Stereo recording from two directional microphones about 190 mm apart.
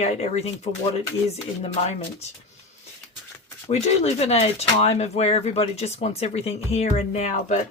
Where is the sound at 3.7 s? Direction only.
35° left (ahead or behind).